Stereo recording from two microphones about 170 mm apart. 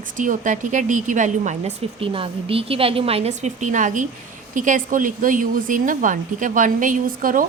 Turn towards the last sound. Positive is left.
turn(degrees=-55)  # may be behind; listen again after turning